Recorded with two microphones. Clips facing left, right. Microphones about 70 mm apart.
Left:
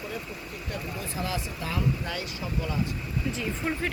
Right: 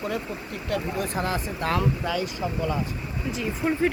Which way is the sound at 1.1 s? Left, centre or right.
Right.